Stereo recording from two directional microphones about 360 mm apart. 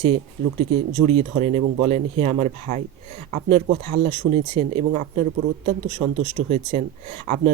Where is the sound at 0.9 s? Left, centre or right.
Centre.